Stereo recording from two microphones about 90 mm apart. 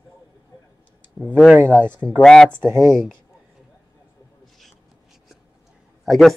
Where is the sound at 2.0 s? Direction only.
10° left (ahead or behind).